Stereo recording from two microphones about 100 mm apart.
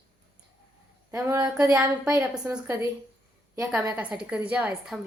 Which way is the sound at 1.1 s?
30° right (ahead or behind).